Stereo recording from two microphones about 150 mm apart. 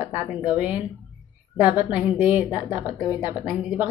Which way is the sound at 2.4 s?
30° left (ahead or behind).